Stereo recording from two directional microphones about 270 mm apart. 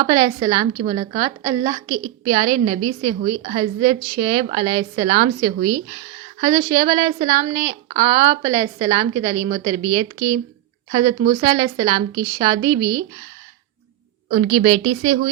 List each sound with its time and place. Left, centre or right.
0.0 s a woman's voice: centre
14.3 s a woman's voice: right